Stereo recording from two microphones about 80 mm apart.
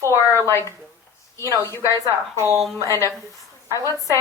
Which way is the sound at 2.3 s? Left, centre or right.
Right.